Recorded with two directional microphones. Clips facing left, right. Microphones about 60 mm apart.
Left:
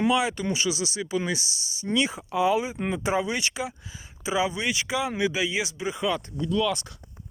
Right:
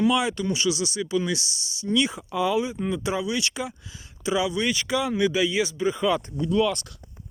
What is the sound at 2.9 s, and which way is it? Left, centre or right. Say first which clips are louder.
Speech: left 1 dB; left.